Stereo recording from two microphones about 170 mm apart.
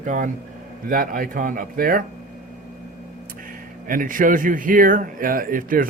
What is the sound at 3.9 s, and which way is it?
Speech, 50° right (ahead or behind).